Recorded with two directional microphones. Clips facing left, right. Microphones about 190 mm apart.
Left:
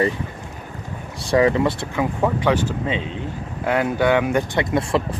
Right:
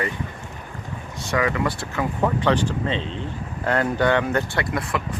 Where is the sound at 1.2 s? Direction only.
30° left (ahead or behind).